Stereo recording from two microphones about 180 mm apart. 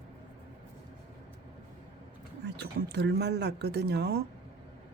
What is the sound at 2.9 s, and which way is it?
Speech, 65° right (ahead or behind).